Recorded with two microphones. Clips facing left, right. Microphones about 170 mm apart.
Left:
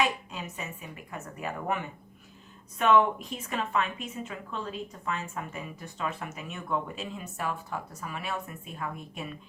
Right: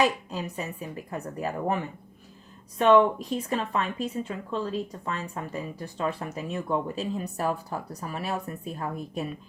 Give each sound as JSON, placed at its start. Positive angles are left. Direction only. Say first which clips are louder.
{"t": 0.0, "sound": "a woman's voice", "louder": "right 4 dB", "side_deg": -35}